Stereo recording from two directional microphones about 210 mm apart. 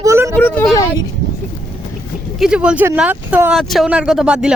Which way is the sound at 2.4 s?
5° right (ahead or behind).